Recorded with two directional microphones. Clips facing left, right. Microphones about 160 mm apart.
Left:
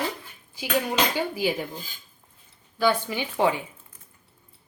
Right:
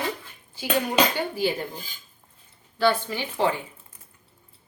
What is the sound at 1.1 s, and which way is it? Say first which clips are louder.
Speech: even; 10° left (ahead or behind).